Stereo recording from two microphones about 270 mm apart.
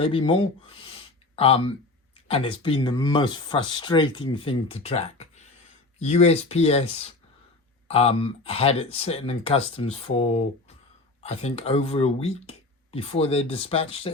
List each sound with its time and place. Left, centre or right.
0.0 s speech: centre